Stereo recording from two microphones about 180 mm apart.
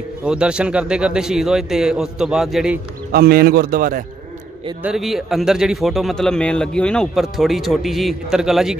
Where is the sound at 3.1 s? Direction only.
60° right (ahead or behind).